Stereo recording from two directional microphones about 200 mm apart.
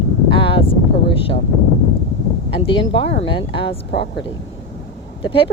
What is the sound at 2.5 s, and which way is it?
Speech, 25° left (ahead or behind).